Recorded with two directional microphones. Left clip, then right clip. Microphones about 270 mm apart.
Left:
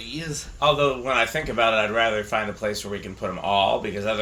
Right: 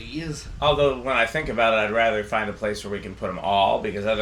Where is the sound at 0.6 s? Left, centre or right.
Centre.